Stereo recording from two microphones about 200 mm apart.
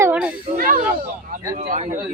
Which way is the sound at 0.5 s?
45° right (ahead or behind).